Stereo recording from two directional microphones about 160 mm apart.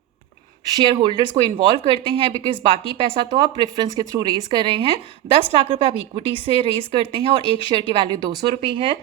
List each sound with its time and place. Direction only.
0.8 s a woman's voice: 30° right (ahead or behind)